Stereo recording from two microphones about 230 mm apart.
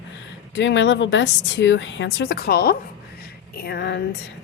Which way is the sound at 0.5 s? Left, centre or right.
Left.